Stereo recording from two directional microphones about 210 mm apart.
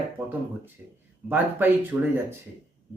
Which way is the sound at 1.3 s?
10° right (ahead or behind).